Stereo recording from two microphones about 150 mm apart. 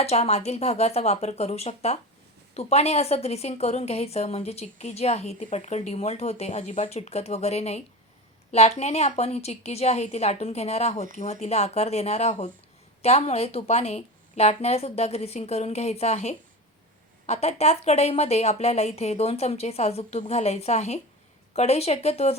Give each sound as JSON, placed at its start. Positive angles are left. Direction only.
{"t": 0.0, "sound": "a woman's voice", "side_deg": 45}